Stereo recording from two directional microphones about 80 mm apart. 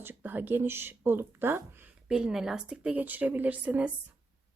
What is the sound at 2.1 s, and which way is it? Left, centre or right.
A woman's voice, centre.